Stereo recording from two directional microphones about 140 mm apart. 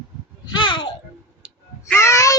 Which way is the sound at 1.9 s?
20° left (ahead or behind).